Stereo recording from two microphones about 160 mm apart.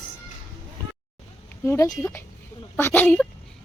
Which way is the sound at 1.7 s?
20° left (ahead or behind).